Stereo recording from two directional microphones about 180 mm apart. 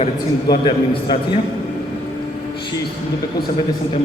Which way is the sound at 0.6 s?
25° left (ahead or behind).